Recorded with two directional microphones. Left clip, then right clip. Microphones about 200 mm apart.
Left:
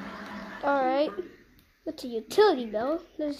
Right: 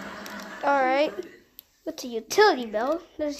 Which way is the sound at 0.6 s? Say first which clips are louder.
Right 3 dB; centre (ahead or behind).